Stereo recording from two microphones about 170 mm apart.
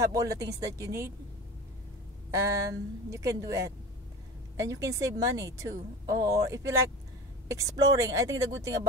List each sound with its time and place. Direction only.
0.0 s a woman's voice: 20° right (ahead or behind)
2.3 s a woman's voice: 20° right (ahead or behind)